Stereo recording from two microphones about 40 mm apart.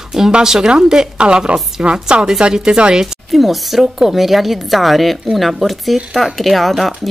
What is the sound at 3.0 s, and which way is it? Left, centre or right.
Speech, centre.